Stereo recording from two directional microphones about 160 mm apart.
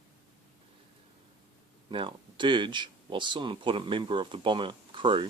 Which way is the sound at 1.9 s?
30° right (ahead or behind).